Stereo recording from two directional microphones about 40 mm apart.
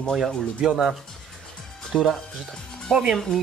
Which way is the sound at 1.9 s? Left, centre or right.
Centre.